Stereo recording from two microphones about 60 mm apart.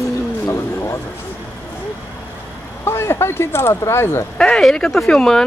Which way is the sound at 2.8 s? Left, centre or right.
Left.